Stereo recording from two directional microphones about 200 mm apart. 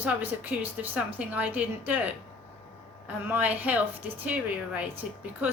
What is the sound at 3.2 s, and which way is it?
A woman's voice, 10° right (ahead or behind).